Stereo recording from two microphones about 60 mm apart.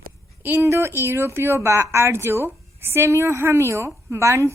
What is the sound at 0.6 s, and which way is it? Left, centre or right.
A woman's voice, right.